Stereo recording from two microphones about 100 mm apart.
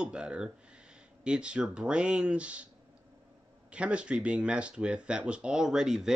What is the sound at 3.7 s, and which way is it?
Speech, 10° right (ahead or behind).